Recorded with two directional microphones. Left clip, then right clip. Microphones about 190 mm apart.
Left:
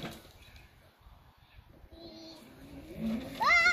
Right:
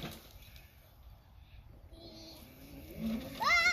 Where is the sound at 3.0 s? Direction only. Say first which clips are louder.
Left 4 dB; 5° right (ahead or behind).